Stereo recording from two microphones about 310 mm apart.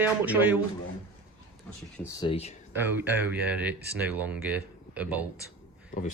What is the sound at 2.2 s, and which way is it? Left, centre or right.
Speech, centre.